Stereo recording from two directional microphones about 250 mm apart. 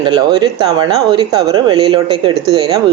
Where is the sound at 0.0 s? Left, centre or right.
Centre.